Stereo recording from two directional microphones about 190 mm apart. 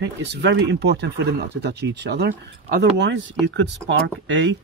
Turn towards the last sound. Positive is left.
turn(degrees=-70)  # may be behind; listen again after turning